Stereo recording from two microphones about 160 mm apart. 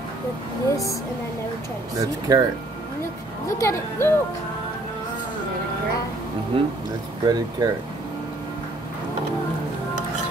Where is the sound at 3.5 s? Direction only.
15° left (ahead or behind).